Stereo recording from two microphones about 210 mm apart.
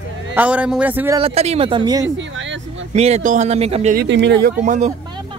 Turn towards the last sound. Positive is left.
turn(degrees=-35)  # may be behind; listen again after turning